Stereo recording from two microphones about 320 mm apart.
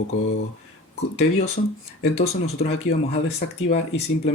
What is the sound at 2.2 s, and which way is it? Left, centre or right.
Speech, centre.